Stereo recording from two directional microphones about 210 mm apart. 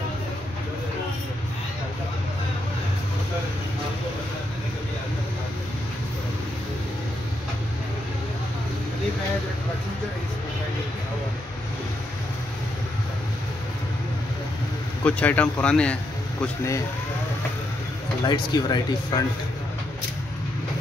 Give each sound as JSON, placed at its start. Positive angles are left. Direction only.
{"t": 15.0, "sound": "speech", "side_deg": 5}
{"t": 18.2, "sound": "speech", "side_deg": 20}